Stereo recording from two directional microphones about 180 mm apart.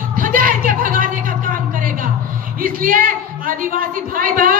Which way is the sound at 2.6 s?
50° right (ahead or behind).